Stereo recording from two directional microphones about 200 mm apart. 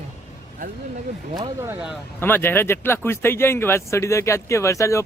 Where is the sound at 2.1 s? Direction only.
10° left (ahead or behind).